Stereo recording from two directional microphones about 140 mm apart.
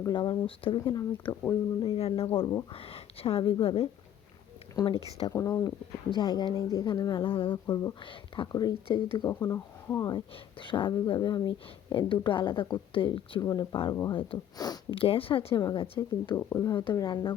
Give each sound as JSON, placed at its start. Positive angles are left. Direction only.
{"t": 0.1, "sound": "speech", "side_deg": 35}
{"t": 4.9, "sound": "speech", "side_deg": 45}
{"t": 5.2, "sound": "speech", "side_deg": 25}
{"t": 9.4, "sound": "speech", "side_deg": 20}
{"t": 13.4, "sound": "speech", "side_deg": 25}
{"t": 15.5, "sound": "speech", "side_deg": 30}
{"t": 16.5, "sound": "speech", "side_deg": 20}